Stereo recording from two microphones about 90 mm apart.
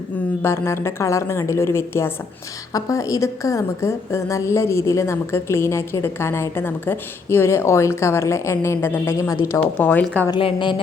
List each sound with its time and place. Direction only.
0.4 s a woman's voice: 30° left (ahead or behind)
9.7 s a woman's voice: 20° left (ahead or behind)
10.3 s a woman's voice: 60° left (ahead or behind)